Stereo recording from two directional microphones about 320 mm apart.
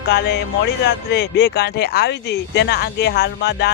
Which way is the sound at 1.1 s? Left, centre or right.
Left.